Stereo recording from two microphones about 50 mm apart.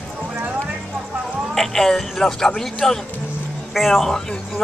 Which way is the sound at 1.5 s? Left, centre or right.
Centre.